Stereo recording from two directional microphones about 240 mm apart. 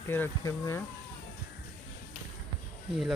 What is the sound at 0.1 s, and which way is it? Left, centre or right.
Speech, centre.